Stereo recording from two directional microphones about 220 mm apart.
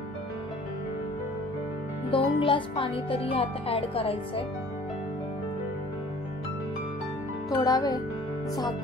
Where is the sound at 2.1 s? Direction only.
25° left (ahead or behind).